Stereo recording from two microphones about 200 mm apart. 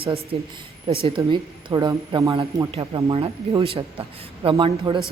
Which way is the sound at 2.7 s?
25° right (ahead or behind).